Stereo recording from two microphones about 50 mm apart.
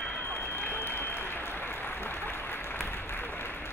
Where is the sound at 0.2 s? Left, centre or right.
Left.